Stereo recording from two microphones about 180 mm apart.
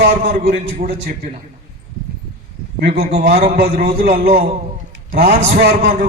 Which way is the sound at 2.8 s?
60° right (ahead or behind).